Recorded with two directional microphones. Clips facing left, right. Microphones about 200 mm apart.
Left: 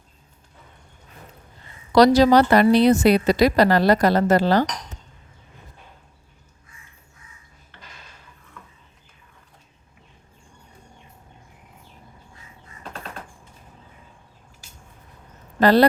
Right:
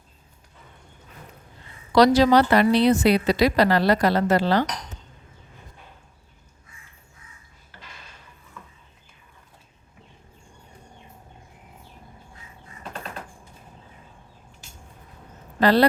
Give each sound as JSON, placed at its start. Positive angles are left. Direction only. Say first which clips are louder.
{"t": 2.0, "sound": "a woman's voice", "louder": "left 2 dB", "side_deg": 40}
{"t": 15.6, "sound": "a woman's voice", "louder": "left 3 dB", "side_deg": 45}